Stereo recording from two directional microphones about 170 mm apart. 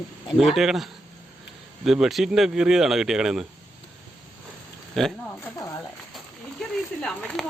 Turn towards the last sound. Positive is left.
turn(degrees=5)  # may be behind; listen again after turning